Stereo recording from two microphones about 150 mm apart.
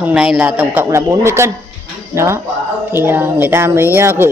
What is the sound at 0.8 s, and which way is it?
A woman's voice, 20° right (ahead or behind).